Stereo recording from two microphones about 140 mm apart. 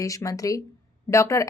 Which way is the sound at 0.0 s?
25° left (ahead or behind).